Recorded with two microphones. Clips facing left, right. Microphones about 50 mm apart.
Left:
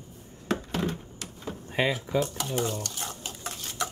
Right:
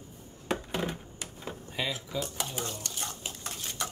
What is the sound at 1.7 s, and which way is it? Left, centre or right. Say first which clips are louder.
Drawer open or close: left 8 dB; left.